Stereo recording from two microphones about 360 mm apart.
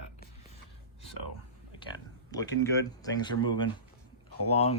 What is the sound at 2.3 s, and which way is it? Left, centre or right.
Speech, centre.